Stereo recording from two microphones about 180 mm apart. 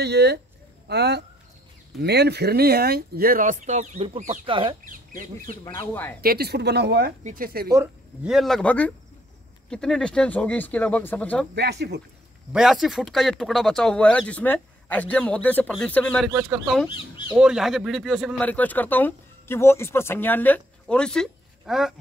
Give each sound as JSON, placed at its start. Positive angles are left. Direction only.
{"t": 0.0, "sound": "speech", "side_deg": -65}
{"t": 6.2, "sound": "speech", "side_deg": -60}
{"t": 7.2, "sound": "speech", "side_deg": -50}
{"t": 7.7, "sound": "a man's voice", "side_deg": -15}
{"t": 8.3, "sound": "speech", "side_deg": 0}
{"t": 11.5, "sound": "speech", "side_deg": -70}
{"t": 12.5, "sound": "speech", "side_deg": 0}